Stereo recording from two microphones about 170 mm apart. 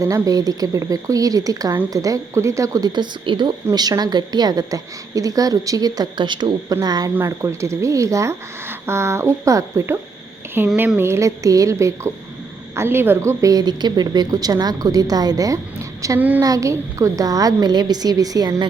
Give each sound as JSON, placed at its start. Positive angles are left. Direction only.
{"t": 0.0, "sound": "speech", "side_deg": -20}